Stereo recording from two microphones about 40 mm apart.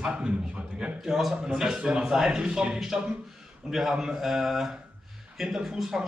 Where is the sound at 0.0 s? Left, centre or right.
Right.